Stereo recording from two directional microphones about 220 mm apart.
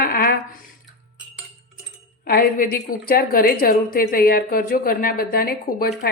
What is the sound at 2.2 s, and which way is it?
A woman's voice, 40° left (ahead or behind).